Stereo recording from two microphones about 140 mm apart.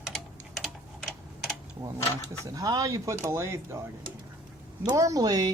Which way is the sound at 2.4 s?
25° right (ahead or behind).